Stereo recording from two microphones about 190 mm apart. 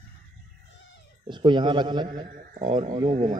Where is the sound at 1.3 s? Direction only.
25° right (ahead or behind).